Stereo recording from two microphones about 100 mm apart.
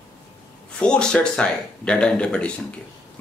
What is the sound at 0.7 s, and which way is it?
Speech, 10° left (ahead or behind).